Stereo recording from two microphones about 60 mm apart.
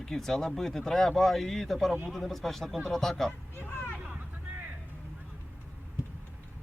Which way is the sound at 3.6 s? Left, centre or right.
Left.